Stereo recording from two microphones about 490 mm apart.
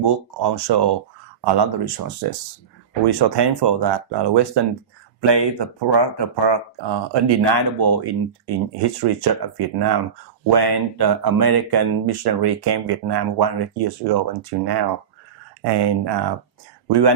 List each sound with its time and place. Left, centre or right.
0.0 s speech: right